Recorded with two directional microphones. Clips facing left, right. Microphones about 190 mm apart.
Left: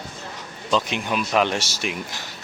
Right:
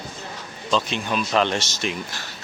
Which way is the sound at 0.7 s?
15° left (ahead or behind).